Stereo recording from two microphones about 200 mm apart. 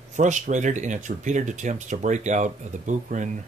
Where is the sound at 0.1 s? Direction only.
40° right (ahead or behind).